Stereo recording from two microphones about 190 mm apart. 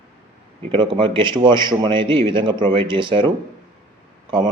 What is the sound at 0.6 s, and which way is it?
A man's voice, 30° right (ahead or behind).